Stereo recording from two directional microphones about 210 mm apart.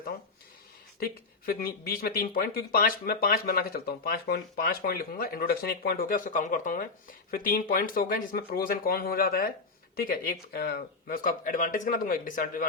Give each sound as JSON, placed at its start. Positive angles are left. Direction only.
{"t": 0.9, "sound": "speech", "side_deg": 45}